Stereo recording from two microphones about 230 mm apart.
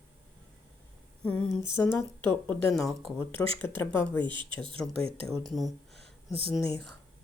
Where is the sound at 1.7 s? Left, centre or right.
Centre.